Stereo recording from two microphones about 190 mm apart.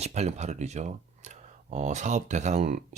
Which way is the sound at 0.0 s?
35° right (ahead or behind).